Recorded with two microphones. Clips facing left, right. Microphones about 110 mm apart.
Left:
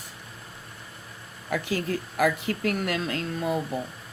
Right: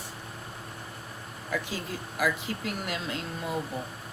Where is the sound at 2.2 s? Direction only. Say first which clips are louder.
Left 5 dB; 55° left (ahead or behind).